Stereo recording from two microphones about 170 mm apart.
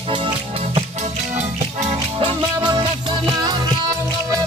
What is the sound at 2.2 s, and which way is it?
Music, 30° right (ahead or behind).